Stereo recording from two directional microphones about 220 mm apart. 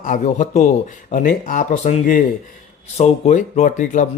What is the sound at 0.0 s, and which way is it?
Speech, 35° left (ahead or behind).